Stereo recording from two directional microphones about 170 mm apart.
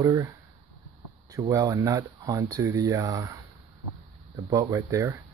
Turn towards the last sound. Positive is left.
turn(degrees=-20)  # may be behind; listen again after turning